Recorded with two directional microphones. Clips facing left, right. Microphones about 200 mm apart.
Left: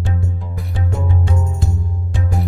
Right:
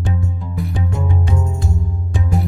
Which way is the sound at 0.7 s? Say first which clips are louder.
Left 2 dB; 15° right (ahead or behind).